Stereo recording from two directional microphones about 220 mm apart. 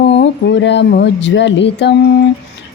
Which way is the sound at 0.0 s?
50° left (ahead or behind).